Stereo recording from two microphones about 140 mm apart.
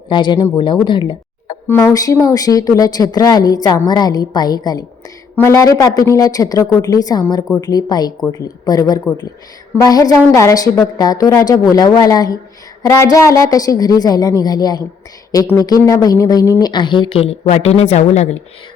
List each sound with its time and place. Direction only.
0.1 s a woman's voice: 35° left (ahead or behind); by 18.3 s 55° left (ahead or behind)